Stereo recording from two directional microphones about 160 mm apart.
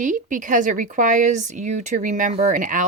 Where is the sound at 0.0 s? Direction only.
55° right (ahead or behind).